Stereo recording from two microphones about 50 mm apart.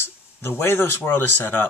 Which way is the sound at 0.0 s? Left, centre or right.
Left.